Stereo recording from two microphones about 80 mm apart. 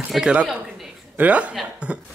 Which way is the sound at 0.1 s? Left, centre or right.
Centre.